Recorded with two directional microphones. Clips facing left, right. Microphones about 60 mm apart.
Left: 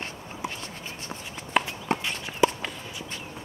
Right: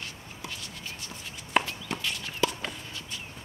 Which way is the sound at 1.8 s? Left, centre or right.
Left.